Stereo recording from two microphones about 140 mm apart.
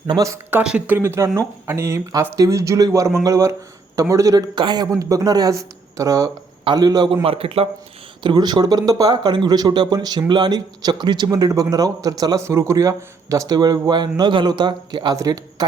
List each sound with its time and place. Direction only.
0.1 s speech: 20° right (ahead or behind)
0.6 s speech: 5° right (ahead or behind)
0.9 s speech: 20° right (ahead or behind); by 7.7 s 45° right (ahead or behind)
8.2 s speech: 30° right (ahead or behind)